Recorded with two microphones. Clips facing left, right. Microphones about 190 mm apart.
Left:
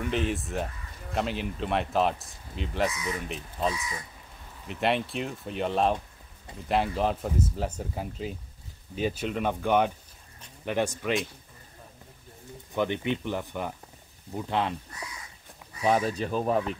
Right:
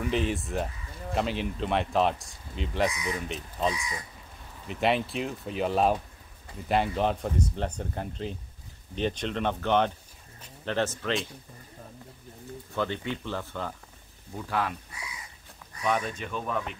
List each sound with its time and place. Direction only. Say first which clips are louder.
0.0 s speech: right 1 dB; centre (ahead or behind)
12.7 s speech: left 3 dB; 15° left (ahead or behind)
15.8 s speech: left 4 dB; 35° left (ahead or behind)